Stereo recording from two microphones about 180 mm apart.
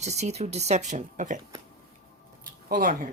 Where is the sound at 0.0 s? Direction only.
40° right (ahead or behind).